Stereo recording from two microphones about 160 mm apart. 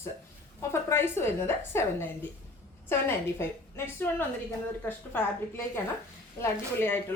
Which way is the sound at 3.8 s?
10° left (ahead or behind).